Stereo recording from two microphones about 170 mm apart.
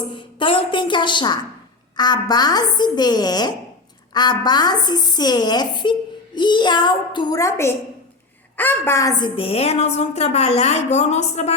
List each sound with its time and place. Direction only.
0.1 s a woman's voice: 30° left (ahead or behind)